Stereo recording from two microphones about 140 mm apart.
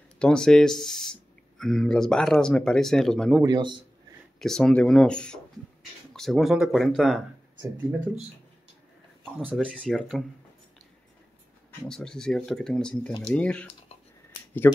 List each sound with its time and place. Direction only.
0.2 s speech: 5° left (ahead or behind)
3.4 s a man's voice: 30° right (ahead or behind)
4.4 s speech: 5° left (ahead or behind)
7.7 s speech: 10° right (ahead or behind)
9.5 s speech: 5° left (ahead or behind)
11.9 s speech: 5° left (ahead or behind)